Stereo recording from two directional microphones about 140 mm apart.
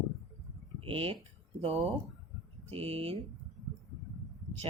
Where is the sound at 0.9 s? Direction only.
40° right (ahead or behind).